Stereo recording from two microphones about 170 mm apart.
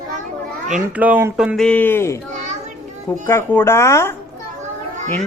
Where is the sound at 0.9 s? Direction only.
10° right (ahead or behind); by 2.1 s 15° left (ahead or behind).